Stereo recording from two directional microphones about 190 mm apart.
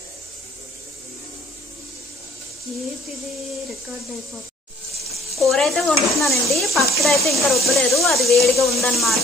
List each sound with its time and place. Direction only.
5.3 s stir: centre (ahead or behind)